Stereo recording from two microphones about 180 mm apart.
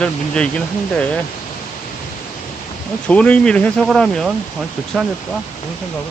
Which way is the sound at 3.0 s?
5° left (ahead or behind).